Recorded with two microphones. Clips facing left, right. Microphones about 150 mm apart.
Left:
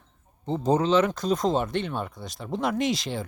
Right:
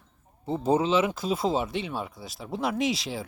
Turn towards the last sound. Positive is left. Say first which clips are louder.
# left 1 dB
turn(degrees=0)  # may be behind; listen again after turning